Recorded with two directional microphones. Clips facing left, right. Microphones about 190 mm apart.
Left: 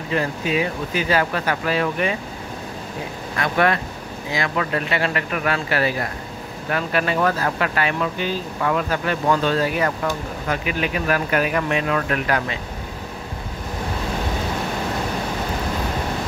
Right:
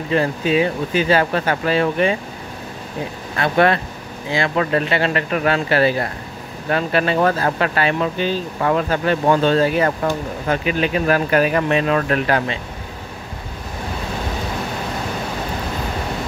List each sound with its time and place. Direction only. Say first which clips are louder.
0.1 s speech: right 4 dB; 30° right (ahead or behind)
3.3 s speech: right 4 dB; 30° right (ahead or behind)